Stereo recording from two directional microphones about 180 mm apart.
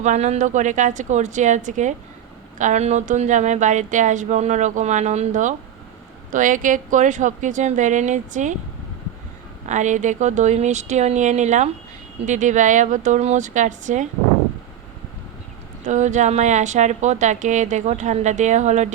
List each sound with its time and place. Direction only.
0.0 s speech: 40° right (ahead or behind)
9.6 s speech: 45° right (ahead or behind)
15.9 s speech: 40° right (ahead or behind)